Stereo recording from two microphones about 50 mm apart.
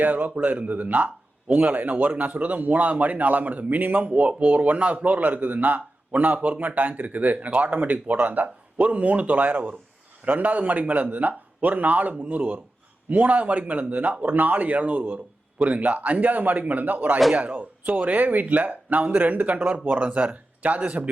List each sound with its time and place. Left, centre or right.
0.0 s a man's voice: right